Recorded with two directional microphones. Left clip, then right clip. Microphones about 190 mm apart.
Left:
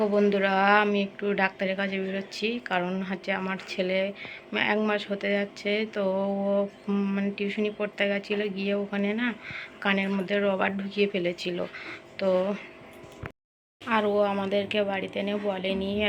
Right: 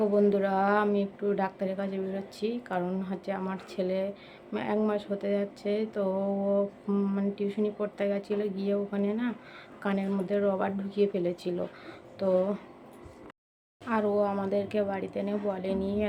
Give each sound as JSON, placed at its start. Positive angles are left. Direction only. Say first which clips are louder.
{"t": 0.1, "sound": "speech", "louder": "left 2 dB", "side_deg": -10}
{"t": 6.1, "sound": "a sound", "louder": "left 2 dB", "side_deg": 15}
{"t": 6.6, "sound": "speech", "louder": "left 1 dB", "side_deg": -10}
{"t": 13.8, "sound": "speech", "louder": "left 3 dB", "side_deg": -5}